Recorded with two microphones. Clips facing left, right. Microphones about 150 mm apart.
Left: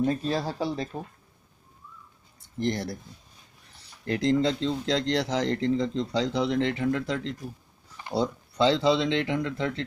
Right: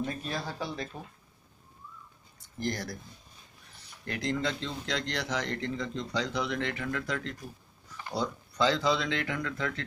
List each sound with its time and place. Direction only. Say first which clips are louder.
0.0 s speech: left 8 dB; 30° left (ahead or behind)
2.6 s speech: left 5 dB; 30° left (ahead or behind)
4.0 s speech: left 8 dB; 30° left (ahead or behind)